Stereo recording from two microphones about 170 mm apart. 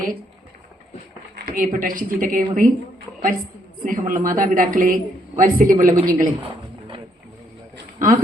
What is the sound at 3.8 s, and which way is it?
A woman's voice, 50° right (ahead or behind).